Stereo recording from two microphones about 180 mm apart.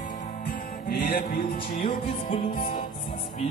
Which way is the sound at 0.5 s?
60° left (ahead or behind).